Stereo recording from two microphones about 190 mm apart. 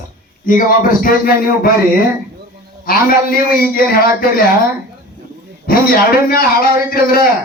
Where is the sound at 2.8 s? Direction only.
50° left (ahead or behind).